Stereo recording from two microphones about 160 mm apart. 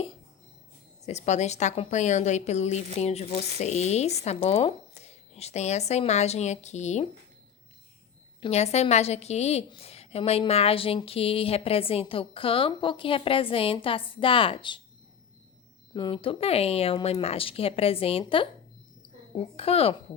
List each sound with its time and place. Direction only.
1.0 s speech: 45° left (ahead or behind)
8.4 s a woman's voice: 40° left (ahead or behind)
15.9 s a woman's voice: 30° left (ahead or behind)